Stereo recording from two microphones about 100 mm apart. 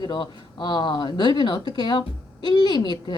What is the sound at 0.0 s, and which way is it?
Speech, 50° left (ahead or behind).